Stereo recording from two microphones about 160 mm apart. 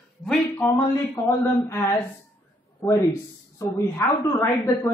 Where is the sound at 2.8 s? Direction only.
15° left (ahead or behind).